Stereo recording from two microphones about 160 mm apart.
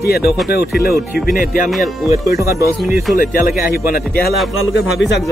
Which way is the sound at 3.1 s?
60° left (ahead or behind).